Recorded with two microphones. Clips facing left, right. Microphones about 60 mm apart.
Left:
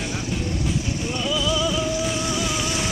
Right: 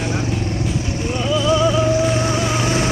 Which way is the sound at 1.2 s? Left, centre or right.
Right.